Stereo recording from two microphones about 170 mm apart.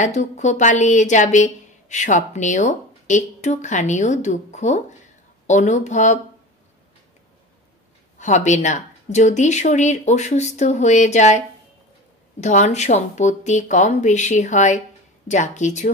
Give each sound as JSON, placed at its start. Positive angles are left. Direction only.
{"t": 0.0, "sound": "a woman's voice", "side_deg": 45}
{"t": 8.2, "sound": "a woman's voice", "side_deg": 45}